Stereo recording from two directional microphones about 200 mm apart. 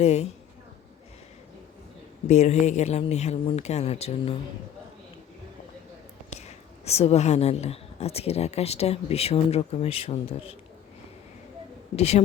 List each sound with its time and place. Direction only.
0.0 s speech: 30° left (ahead or behind)
2.2 s speech: 35° left (ahead or behind)
6.3 s speech: 30° left (ahead or behind)
11.9 s speech: 30° left (ahead or behind)